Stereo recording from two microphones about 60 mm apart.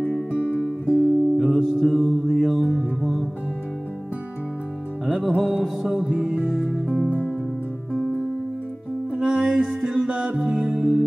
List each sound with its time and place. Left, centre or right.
0.3 s music: centre
0.9 s music: centre
1.3 s music: centre
5.0 s music: centre